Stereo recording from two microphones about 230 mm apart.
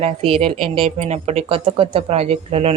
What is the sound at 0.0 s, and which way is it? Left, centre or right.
Speech, right.